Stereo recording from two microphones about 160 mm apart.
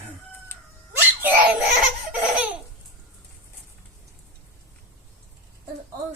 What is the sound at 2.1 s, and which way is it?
Laughter, 10° right (ahead or behind).